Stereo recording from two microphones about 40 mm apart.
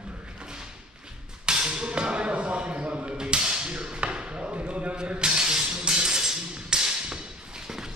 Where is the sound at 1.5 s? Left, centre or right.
Centre.